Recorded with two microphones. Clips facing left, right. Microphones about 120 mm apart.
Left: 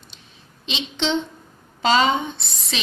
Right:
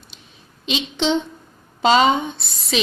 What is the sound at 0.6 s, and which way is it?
Speech, 25° left (ahead or behind).